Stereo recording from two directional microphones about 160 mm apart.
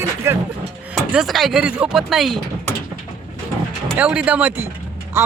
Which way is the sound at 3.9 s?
5° right (ahead or behind).